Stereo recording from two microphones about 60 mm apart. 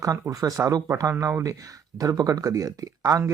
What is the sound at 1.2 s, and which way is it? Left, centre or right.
Speech, right.